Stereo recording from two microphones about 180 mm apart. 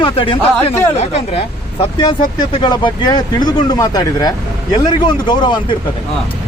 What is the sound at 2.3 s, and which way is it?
Speech, 25° left (ahead or behind).